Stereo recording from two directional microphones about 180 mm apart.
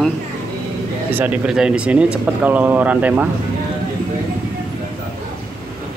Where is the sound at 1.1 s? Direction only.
10° right (ahead or behind).